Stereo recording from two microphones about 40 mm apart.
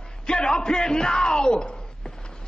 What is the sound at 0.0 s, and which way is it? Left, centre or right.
Speech, centre.